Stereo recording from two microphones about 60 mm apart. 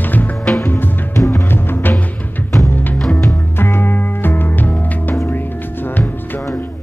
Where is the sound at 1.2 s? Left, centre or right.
Left.